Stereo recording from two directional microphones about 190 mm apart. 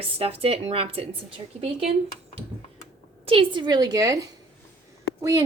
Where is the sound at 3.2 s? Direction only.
25° right (ahead or behind).